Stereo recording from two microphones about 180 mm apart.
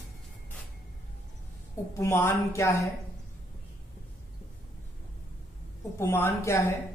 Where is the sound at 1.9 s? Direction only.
15° left (ahead or behind).